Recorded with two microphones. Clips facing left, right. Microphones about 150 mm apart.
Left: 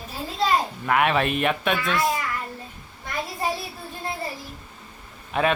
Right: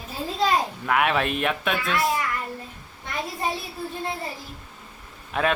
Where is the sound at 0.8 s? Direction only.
Centre (ahead or behind).